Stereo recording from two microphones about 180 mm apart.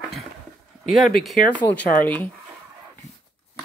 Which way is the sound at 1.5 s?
10° left (ahead or behind).